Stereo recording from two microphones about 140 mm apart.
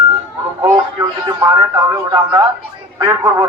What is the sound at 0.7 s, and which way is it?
Speech, 35° right (ahead or behind).